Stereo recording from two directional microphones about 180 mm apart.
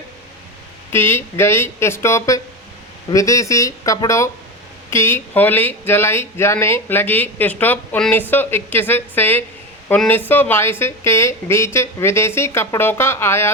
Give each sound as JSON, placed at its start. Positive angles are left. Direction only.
{"t": 0.9, "sound": "speech", "side_deg": 15}